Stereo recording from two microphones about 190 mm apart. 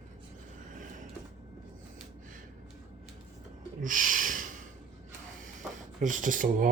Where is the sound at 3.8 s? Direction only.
45° right (ahead or behind).